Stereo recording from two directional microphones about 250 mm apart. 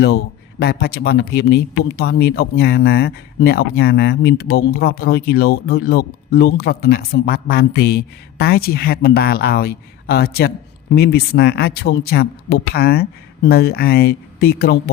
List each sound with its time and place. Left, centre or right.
0.6 s speech: left